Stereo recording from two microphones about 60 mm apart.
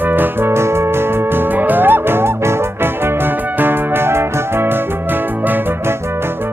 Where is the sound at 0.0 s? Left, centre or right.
Right.